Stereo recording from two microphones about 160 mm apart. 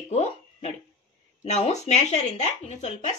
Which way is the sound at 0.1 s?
45° left (ahead or behind).